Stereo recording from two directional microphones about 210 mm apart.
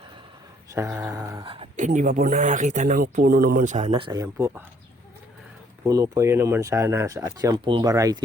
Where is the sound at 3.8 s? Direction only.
25° right (ahead or behind).